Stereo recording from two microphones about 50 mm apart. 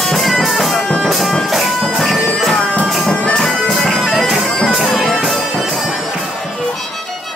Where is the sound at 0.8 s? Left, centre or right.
Centre.